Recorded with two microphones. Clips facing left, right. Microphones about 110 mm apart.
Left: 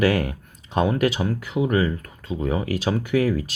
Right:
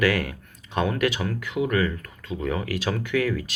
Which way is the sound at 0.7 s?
20° left (ahead or behind).